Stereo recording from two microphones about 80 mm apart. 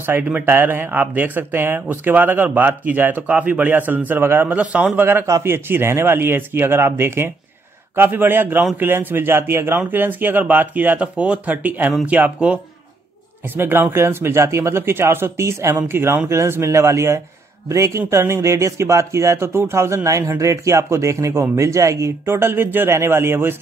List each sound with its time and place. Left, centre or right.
0.0 s speech: right
5.2 s speech: right; by 12.5 s centre
13.6 s speech: right